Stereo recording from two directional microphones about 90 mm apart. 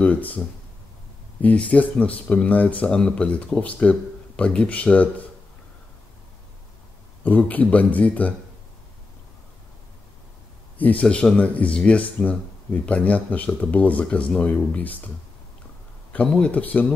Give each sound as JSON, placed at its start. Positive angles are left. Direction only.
{"t": 0.0, "sound": "speech", "side_deg": 15}
{"t": 1.4, "sound": "speech", "side_deg": 15}
{"t": 7.2, "sound": "speech", "side_deg": 20}
{"t": 10.8, "sound": "speech", "side_deg": 15}
{"t": 16.1, "sound": "speech", "side_deg": 15}